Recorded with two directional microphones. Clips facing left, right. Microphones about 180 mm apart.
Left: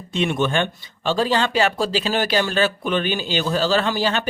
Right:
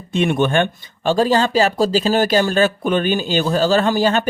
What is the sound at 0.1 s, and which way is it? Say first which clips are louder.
Speech: right 4 dB; 55° right (ahead or behind).